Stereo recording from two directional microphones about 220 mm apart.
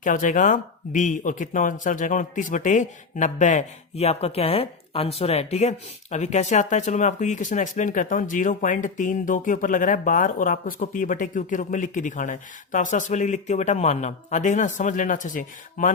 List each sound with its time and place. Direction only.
0.0 s speech: 35° left (ahead or behind)